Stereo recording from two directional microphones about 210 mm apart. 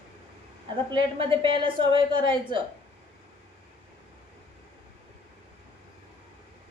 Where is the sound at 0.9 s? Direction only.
25° right (ahead or behind).